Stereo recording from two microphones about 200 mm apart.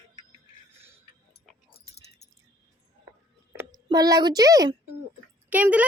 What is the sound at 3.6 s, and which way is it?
A woman's voice, 20° right (ahead or behind).